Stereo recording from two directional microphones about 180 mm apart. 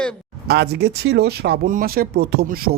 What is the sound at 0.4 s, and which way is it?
A man's voice, 65° right (ahead or behind).